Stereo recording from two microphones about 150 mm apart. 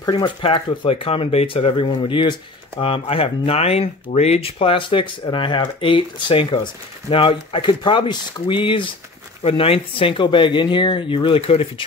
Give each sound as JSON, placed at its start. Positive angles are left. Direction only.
{"t": 0.1, "sound": "speech", "side_deg": 35}